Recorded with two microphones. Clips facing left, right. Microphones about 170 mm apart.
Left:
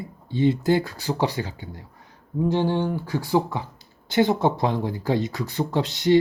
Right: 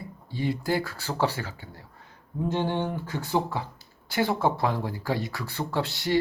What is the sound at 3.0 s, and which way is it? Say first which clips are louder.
Speech: left 5 dB; 15° left (ahead or behind).